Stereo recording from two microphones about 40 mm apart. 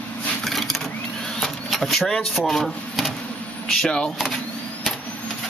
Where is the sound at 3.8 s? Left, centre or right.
Centre.